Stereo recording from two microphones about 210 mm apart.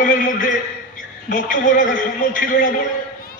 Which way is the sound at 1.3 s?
40° left (ahead or behind).